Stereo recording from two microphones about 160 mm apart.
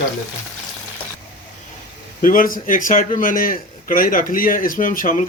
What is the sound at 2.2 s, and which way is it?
A man's voice, 60° left (ahead or behind).